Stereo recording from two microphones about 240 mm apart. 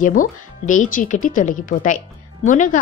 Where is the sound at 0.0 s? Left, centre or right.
Left.